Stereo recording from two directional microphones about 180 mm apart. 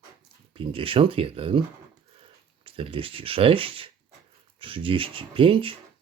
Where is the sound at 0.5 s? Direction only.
30° right (ahead or behind).